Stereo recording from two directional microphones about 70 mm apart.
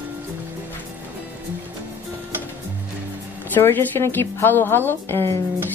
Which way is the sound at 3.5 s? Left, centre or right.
Left.